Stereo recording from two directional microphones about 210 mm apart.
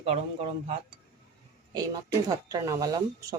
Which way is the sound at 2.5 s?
15° right (ahead or behind).